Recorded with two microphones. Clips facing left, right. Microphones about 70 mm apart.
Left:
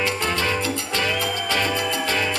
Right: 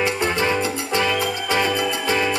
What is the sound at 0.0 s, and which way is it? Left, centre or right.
Music, right.